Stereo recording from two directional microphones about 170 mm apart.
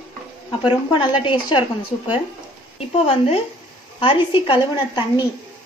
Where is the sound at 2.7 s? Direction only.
35° left (ahead or behind).